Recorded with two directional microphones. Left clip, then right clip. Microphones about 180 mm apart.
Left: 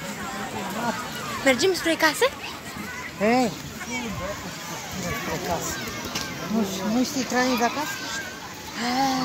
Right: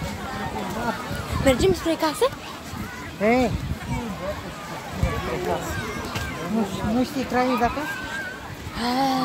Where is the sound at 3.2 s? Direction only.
30° left (ahead or behind).